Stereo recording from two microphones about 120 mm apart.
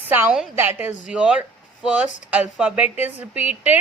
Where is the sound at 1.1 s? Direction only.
5° right (ahead or behind).